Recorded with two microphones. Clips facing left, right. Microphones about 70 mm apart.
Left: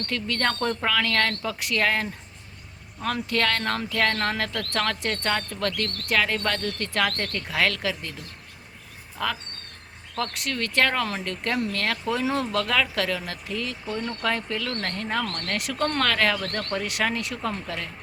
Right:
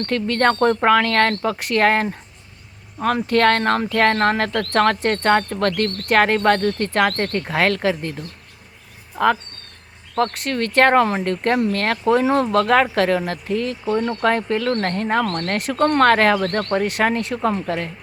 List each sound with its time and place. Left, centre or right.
0.1 s speech: right
9.1 s speech: right